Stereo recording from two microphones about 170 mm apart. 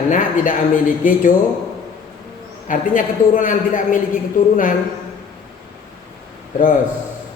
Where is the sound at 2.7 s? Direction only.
50° left (ahead or behind).